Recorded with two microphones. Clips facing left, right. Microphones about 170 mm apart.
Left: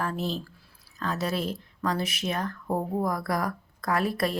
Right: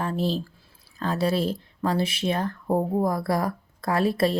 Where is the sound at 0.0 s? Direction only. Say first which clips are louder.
Right 4 dB; 30° right (ahead or behind).